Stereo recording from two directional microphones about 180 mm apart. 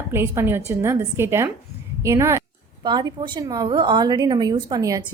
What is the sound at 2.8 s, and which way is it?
A woman's voice, 25° right (ahead or behind).